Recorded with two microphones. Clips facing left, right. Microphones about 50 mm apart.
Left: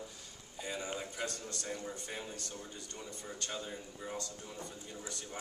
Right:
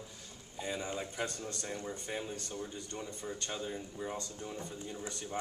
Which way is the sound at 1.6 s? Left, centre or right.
Centre.